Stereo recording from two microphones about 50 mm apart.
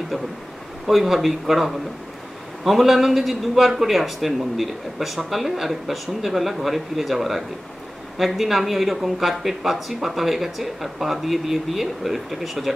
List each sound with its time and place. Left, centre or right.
0.8 s a man's voice: centre